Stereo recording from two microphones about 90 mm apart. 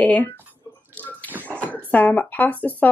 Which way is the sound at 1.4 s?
15° left (ahead or behind).